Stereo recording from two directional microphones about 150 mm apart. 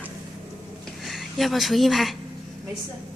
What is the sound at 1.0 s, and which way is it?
A woman's voice, centre (ahead or behind).